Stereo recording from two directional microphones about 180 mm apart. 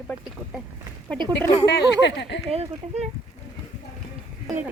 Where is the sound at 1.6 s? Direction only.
70° left (ahead or behind).